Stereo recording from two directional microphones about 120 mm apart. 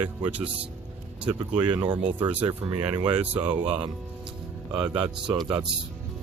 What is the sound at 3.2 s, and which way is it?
Speech, 15° right (ahead or behind).